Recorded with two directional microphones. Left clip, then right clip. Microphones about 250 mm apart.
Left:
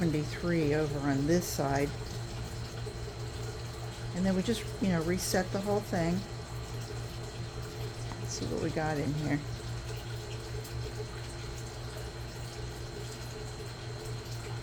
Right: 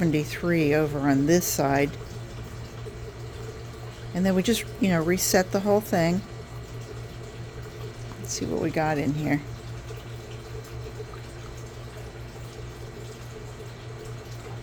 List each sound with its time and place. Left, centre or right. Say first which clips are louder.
0.0 s a woman's voice: right 7 dB; right
4.2 s a woman's voice: right 8 dB; right
8.3 s a woman's voice: right 7 dB; right